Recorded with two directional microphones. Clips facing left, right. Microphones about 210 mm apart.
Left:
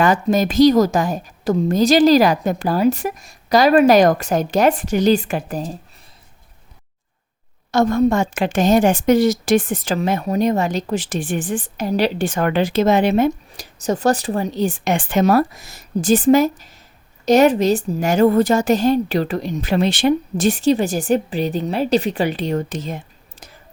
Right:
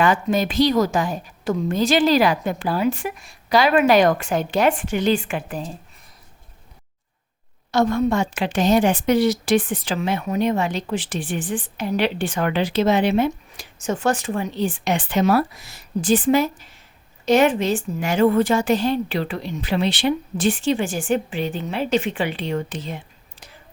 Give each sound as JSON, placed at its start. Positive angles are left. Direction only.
{"t": 0.0, "sound": "speech", "side_deg": 40}
{"t": 7.7, "sound": "a woman's voice", "side_deg": 45}